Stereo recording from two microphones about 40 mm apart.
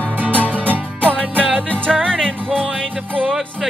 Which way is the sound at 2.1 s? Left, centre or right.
Left.